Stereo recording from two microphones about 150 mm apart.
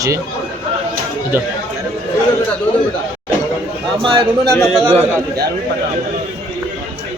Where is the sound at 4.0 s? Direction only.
35° right (ahead or behind).